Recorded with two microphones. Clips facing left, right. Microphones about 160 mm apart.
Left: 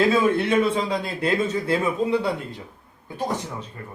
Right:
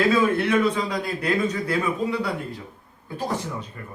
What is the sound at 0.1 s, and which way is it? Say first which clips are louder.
A man's voice: left 1 dB; 25° left (ahead or behind).